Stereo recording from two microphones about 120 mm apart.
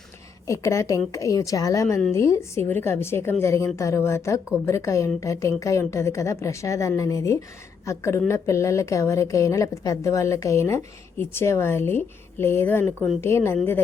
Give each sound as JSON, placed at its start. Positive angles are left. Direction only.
{"t": 0.4, "sound": "a woman's voice", "side_deg": 25}